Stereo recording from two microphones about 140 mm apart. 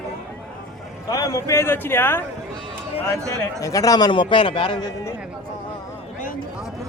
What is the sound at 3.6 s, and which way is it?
A man's voice, 25° left (ahead or behind).